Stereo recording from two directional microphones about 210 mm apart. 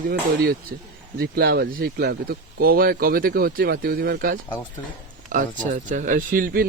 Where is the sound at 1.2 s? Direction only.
50° right (ahead or behind).